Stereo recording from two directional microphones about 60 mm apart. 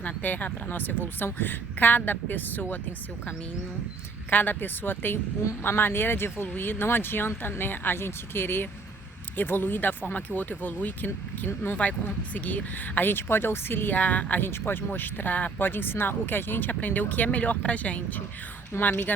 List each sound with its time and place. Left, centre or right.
0.0 s speech: left
4.3 s speech: left
11.7 s a woman's voice: left